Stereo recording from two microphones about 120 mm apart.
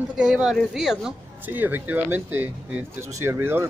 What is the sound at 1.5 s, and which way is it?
Speech, 15° right (ahead or behind).